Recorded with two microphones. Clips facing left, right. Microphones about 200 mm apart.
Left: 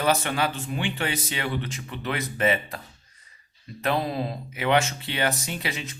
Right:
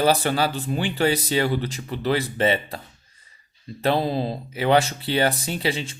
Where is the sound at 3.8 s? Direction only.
30° right (ahead or behind).